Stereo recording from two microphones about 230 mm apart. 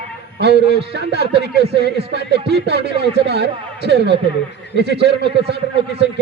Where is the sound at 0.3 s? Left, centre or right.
Right.